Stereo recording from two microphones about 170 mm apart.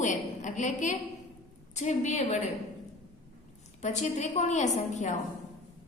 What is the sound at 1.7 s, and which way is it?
Speech, 45° left (ahead or behind).